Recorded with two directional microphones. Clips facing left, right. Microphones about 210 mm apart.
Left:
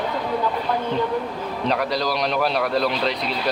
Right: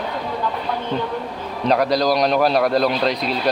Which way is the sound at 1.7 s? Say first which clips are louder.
Right 7 dB; 40° right (ahead or behind).